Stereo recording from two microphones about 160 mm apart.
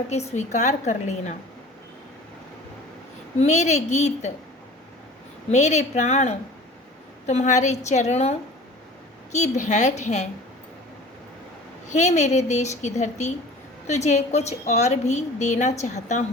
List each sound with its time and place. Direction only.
0.1 s a woman's voice: 45° left (ahead or behind)
3.3 s a woman's voice: 45° left (ahead or behind)
5.5 s a woman's voice: 45° left (ahead or behind)
11.9 s a woman's voice: 45° left (ahead or behind)